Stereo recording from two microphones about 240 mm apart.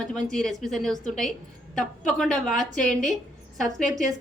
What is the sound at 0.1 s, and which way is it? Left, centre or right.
A woman's voice, centre.